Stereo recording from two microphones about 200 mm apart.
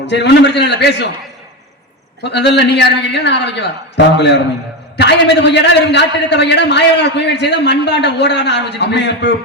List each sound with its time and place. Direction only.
0.0 s a man's voice: 60° left (ahead or behind)
2.2 s a man's voice: 60° left (ahead or behind)